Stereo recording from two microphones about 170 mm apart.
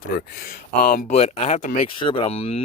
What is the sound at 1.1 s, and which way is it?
Speech, 40° left (ahead or behind).